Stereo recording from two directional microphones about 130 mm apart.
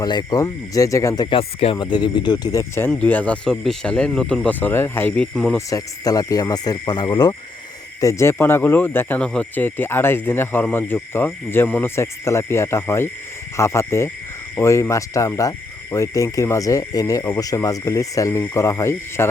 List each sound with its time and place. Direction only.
0.0 s cricket: 30° left (ahead or behind)
1.4 s speech: 45° left (ahead or behind)
1.8 s speech: 35° left (ahead or behind); by 5.5 s 5° left (ahead or behind)
5.5 s cricket: 30° left (ahead or behind)
8.0 s speech: 20° left (ahead or behind)
13.6 s cricket: 20° left (ahead or behind)